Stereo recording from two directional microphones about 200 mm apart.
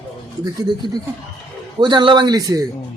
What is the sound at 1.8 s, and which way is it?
Speech, 25° right (ahead or behind).